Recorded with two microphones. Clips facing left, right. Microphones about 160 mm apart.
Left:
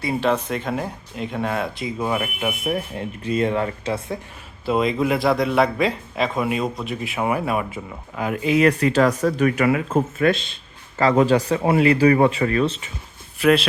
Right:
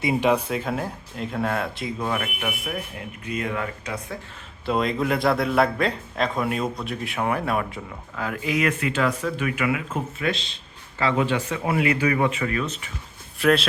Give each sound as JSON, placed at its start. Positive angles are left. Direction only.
{"t": 0.0, "sound": "speech", "side_deg": -15}
{"t": 2.0, "sound": "speech", "side_deg": 15}
{"t": 3.2, "sound": "speech", "side_deg": 30}
{"t": 4.6, "sound": "speech", "side_deg": 0}
{"t": 8.1, "sound": "speech", "side_deg": 20}
{"t": 13.4, "sound": "speech", "side_deg": 0}